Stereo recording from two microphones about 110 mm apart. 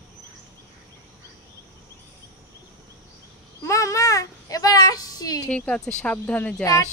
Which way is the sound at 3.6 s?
30° left (ahead or behind).